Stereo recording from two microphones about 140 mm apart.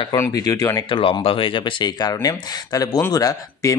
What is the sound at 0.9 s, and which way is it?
Speech, 40° left (ahead or behind).